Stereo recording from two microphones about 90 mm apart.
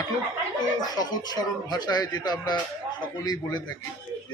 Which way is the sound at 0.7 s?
45° left (ahead or behind).